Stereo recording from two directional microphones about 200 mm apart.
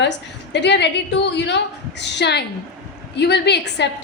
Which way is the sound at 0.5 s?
60° left (ahead or behind).